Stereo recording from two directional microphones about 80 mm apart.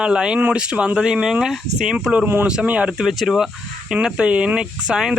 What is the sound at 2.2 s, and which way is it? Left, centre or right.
Speech, right.